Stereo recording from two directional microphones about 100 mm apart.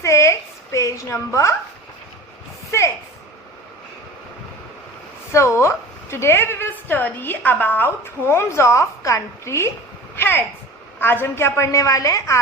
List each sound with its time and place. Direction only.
0.0 s a woman's voice: 30° left (ahead or behind)
5.3 s a woman's voice: 25° left (ahead or behind)